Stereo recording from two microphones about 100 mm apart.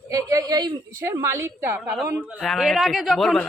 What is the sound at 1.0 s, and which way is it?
Speech, 25° right (ahead or behind).